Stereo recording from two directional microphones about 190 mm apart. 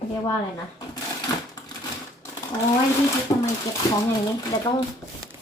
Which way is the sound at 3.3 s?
15° left (ahead or behind).